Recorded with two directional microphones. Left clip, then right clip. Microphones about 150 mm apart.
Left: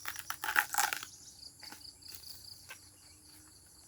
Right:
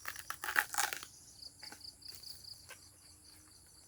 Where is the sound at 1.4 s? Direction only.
35° right (ahead or behind).